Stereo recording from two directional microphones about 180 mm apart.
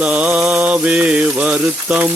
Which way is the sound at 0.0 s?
5° right (ahead or behind).